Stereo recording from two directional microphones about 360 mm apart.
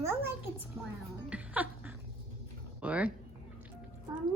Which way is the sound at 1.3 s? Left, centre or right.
Centre.